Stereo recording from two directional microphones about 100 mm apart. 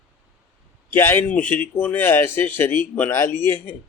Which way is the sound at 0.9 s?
20° left (ahead or behind).